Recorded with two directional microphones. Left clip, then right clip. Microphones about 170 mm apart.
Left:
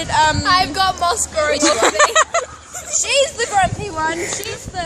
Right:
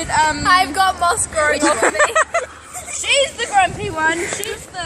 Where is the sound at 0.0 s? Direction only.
35° left (ahead or behind).